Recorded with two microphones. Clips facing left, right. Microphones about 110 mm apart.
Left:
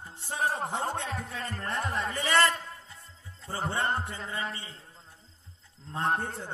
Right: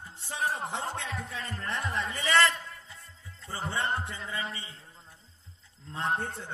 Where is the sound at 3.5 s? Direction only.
35° left (ahead or behind).